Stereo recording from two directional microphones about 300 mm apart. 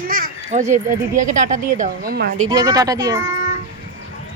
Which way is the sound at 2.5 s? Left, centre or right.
Centre.